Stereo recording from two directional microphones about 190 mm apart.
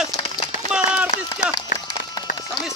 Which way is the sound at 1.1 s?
40° left (ahead or behind).